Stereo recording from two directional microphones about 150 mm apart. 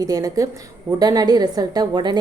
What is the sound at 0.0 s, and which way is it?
A woman's voice, 25° right (ahead or behind).